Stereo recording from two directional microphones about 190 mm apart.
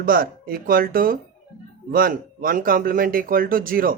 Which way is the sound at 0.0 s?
50° right (ahead or behind).